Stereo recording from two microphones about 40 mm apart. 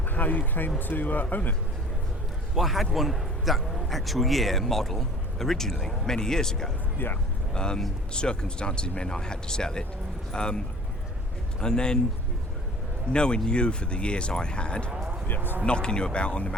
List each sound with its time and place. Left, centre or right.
0.0 s speech: left
2.6 s a man's voice: centre
7.0 s speech: left
7.5 s speech: left
11.6 s speech: centre
13.1 s speech: left